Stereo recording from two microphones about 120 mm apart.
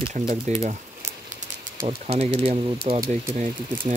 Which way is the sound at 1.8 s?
55° right (ahead or behind).